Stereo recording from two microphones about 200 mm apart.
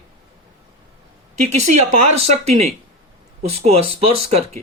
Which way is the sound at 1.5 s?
35° right (ahead or behind).